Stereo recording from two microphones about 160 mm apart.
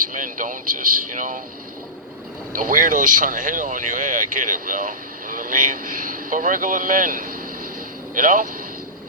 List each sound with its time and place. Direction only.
0.0 s speech: 55° right (ahead or behind)
2.5 s speech: 60° right (ahead or behind)